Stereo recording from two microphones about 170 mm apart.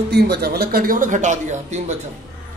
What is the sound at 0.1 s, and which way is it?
Speech, 70° right (ahead or behind).